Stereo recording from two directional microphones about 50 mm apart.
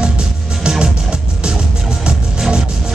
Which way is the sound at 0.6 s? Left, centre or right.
Centre.